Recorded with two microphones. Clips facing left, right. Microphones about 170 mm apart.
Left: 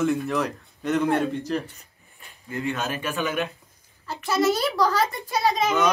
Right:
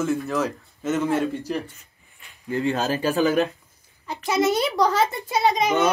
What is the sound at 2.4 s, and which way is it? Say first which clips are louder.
Speech: right 5 dB; 30° right (ahead or behind).